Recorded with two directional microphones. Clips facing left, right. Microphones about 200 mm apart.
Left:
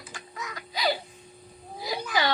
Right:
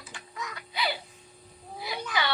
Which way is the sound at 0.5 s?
40° left (ahead or behind).